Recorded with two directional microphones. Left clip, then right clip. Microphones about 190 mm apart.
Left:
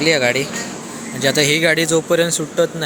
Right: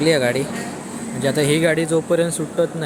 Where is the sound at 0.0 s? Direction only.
5° right (ahead or behind).